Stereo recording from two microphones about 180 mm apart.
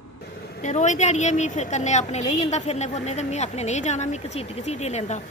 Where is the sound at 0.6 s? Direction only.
45° left (ahead or behind).